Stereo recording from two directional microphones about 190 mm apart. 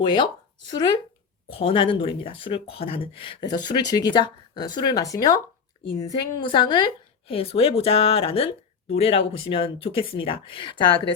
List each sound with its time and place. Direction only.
0.0 s a woman's voice: 25° left (ahead or behind)